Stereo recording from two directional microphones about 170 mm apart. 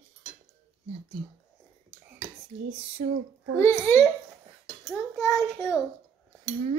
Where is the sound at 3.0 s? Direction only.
40° right (ahead or behind).